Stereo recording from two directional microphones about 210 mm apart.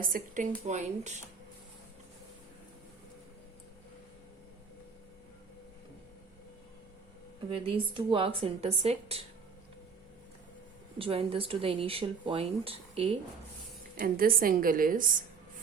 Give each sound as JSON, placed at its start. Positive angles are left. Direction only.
{"t": 0.0, "sound": "a woman's voice", "side_deg": -40}
{"t": 7.5, "sound": "speech", "side_deg": -25}
{"t": 10.9, "sound": "speech", "side_deg": -25}
{"t": 14.0, "sound": "a woman's voice", "side_deg": -45}